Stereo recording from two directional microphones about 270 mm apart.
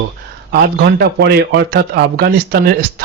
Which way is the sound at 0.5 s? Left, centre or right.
Right.